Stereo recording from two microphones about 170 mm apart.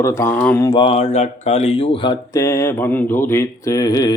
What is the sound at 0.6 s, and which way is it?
Speech, 30° left (ahead or behind).